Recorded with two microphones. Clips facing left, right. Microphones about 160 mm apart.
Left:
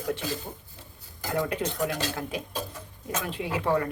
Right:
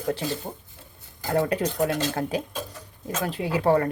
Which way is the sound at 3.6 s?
55° right (ahead or behind).